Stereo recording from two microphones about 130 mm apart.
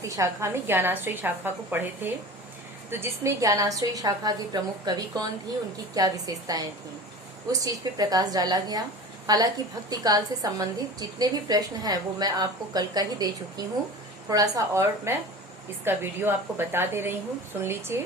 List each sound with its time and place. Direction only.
0.2 s a woman's voice: 20° right (ahead or behind)
7.6 s a woman's voice: 30° right (ahead or behind)